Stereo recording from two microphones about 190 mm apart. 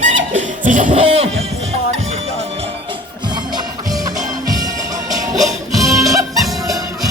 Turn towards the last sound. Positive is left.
turn(degrees=0)  # may be behind; listen again after turning